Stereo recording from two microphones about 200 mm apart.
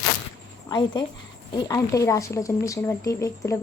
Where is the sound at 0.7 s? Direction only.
20° left (ahead or behind).